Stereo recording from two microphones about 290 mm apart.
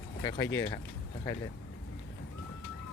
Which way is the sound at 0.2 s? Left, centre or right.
Centre.